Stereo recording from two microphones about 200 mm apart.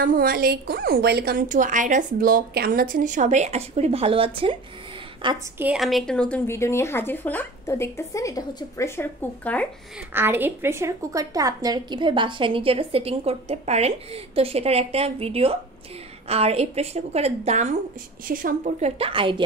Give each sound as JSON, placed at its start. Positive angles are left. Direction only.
{"t": 0.0, "sound": "a woman's voice", "side_deg": -45}
{"t": 5.6, "sound": "a woman's voice", "side_deg": -5}
{"t": 10.1, "sound": "a woman's voice", "side_deg": -10}